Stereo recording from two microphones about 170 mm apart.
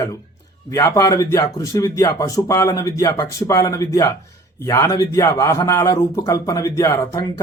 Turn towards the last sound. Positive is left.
turn(degrees=20)  # may be behind; listen again after turning